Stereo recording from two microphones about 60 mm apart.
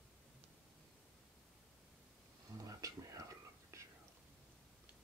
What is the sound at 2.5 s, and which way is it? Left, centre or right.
Whispering, right.